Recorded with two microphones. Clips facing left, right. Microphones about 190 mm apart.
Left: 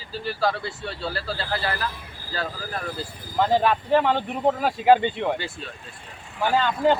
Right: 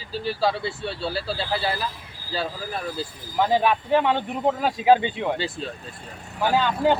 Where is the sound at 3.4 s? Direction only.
10° right (ahead or behind).